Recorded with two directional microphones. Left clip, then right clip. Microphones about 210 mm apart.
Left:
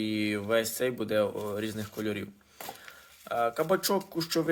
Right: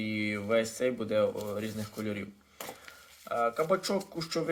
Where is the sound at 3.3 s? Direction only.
45° left (ahead or behind).